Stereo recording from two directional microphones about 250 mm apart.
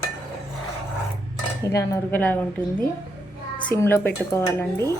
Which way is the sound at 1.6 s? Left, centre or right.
Centre.